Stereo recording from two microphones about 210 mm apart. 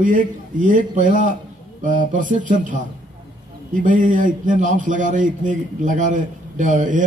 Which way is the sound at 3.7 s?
40° right (ahead or behind).